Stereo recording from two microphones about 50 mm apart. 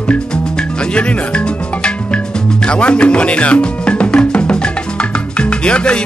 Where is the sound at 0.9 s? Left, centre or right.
Left.